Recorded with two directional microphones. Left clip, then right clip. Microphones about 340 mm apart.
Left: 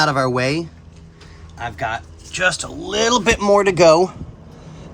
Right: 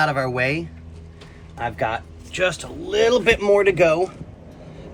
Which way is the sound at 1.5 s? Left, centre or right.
Centre.